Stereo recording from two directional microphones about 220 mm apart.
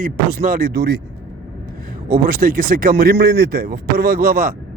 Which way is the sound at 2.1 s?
40° right (ahead or behind).